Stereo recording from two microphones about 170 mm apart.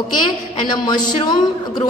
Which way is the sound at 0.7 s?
25° left (ahead or behind).